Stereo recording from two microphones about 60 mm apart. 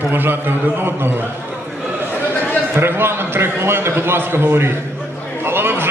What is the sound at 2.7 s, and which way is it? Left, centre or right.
A man's voice, right.